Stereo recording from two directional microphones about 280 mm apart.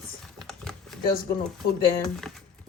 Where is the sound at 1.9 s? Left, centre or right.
Centre.